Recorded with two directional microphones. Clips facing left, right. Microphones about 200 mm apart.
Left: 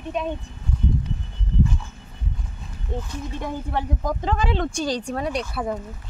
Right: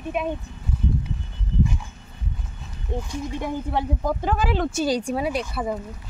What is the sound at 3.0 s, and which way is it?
Speech, 15° right (ahead or behind).